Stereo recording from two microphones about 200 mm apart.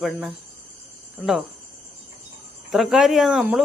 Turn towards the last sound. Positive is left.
turn(degrees=-5)  # may be behind; listen again after turning